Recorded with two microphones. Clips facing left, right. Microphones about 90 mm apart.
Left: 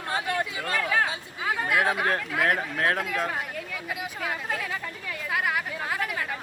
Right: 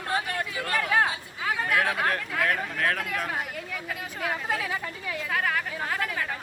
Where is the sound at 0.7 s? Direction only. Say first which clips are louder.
Right 1 dB; 10° right (ahead or behind).